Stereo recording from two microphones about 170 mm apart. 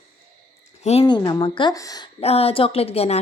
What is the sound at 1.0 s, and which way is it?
Speech, 25° left (ahead or behind).